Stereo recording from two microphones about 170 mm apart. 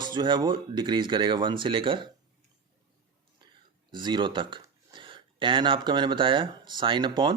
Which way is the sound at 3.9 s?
25° right (ahead or behind).